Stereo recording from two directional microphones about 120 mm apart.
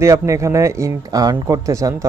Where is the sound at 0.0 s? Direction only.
25° right (ahead or behind).